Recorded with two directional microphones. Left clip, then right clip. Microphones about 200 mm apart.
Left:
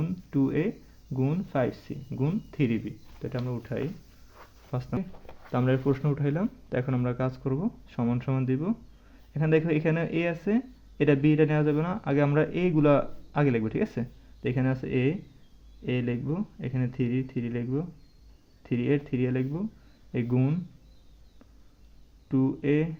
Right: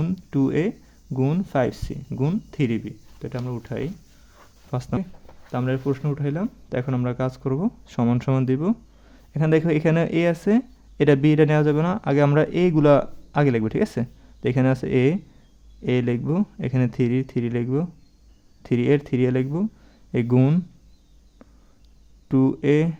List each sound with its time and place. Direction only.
0.0 s speech: 35° right (ahead or behind)
5.5 s speech: 10° right (ahead or behind); by 20.6 s 40° right (ahead or behind)
22.3 s speech: 35° right (ahead or behind)